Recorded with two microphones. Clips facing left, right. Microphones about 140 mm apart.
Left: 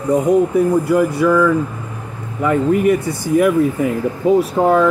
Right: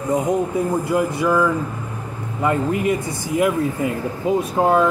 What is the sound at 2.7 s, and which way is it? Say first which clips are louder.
Speech: left 6 dB; 20° right (ahead or behind).